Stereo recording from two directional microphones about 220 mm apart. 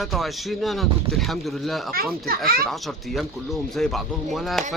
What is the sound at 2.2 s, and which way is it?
Speech, 40° right (ahead or behind).